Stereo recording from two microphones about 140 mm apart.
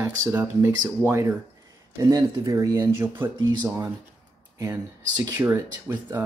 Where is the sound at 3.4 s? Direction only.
30° right (ahead or behind).